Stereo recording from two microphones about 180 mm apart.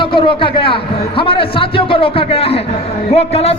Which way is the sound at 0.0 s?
25° left (ahead or behind).